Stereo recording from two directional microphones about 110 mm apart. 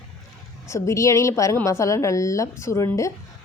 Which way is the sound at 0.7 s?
25° left (ahead or behind).